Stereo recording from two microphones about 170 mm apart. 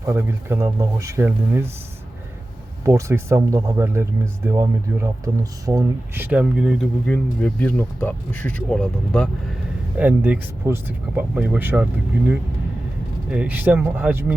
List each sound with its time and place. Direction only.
0.0 s speech: 15° right (ahead or behind)
2.8 s speech: 15° right (ahead or behind)
7.1 s speech: 10° left (ahead or behind)
10.0 s speech: 10° right (ahead or behind)
13.3 s speech: 10° right (ahead or behind)